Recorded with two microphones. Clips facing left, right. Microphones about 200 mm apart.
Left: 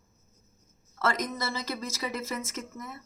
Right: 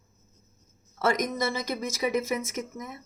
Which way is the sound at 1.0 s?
15° right (ahead or behind).